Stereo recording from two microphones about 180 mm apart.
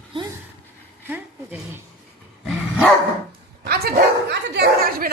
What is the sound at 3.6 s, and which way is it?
Speech, 60° right (ahead or behind).